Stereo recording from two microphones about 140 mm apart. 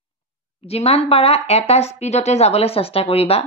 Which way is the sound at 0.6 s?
45° left (ahead or behind).